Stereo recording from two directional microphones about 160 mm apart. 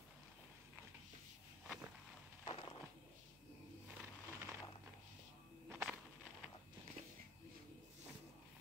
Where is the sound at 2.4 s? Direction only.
30° left (ahead or behind).